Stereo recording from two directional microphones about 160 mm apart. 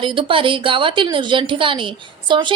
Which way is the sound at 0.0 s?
30° right (ahead or behind).